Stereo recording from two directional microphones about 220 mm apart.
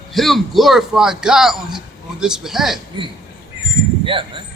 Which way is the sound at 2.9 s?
20° right (ahead or behind).